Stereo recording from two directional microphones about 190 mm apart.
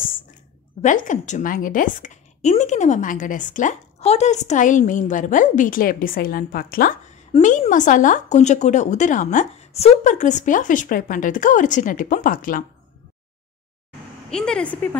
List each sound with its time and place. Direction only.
0.8 s a woman's voice: 40° left (ahead or behind)
7.3 s a woman's voice: 35° left (ahead or behind)
14.3 s a woman's voice: 5° left (ahead or behind)